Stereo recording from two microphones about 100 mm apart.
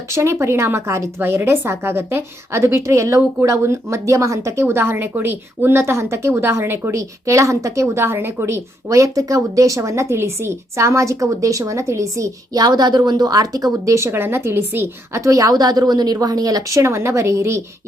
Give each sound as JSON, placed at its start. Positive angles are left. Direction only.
{"t": 0.1, "sound": "a woman's voice", "side_deg": -30}